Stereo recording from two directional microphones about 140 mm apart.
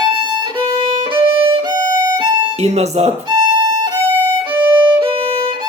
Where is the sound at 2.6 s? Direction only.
50° right (ahead or behind).